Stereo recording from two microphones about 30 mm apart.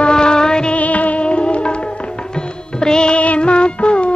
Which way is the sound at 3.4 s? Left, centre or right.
Left.